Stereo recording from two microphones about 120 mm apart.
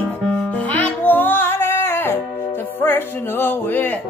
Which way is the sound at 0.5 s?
15° left (ahead or behind).